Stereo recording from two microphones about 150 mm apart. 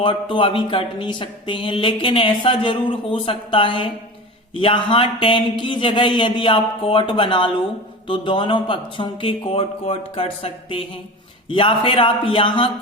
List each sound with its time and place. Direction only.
0.0 s speech: 35° left (ahead or behind)